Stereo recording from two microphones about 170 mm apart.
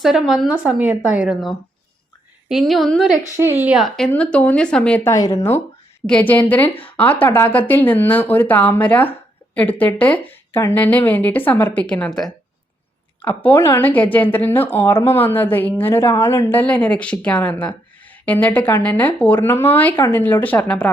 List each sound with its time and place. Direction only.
0.0 s speech: centre (ahead or behind)
3.3 s speech: 15° right (ahead or behind); by 5.1 s 5° left (ahead or behind)
5.1 s a woman's voice: 20° left (ahead or behind)